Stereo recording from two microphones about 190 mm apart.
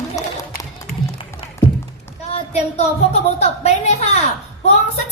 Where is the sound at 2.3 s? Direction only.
35° left (ahead or behind).